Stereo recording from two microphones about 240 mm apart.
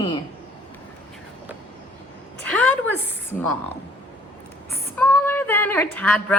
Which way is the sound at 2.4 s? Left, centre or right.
Centre.